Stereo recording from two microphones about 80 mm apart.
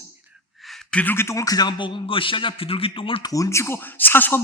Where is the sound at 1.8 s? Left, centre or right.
Left.